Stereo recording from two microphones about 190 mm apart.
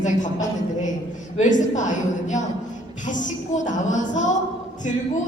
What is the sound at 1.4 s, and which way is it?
A woman's voice, 40° left (ahead or behind).